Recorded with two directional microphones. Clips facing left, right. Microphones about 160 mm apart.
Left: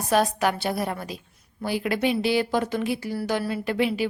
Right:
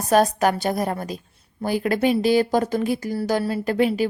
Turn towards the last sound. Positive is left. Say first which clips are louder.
# right 4 dB
turn(degrees=-45)  # may be behind; listen again after turning